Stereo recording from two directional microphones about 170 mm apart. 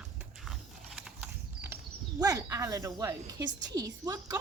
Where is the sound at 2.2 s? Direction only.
20° right (ahead or behind).